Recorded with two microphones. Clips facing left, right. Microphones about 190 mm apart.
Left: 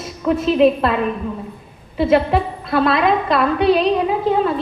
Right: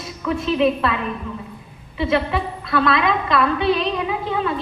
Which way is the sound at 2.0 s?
40° left (ahead or behind).